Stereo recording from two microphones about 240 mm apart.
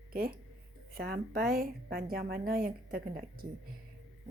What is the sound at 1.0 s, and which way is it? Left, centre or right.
Speech, right.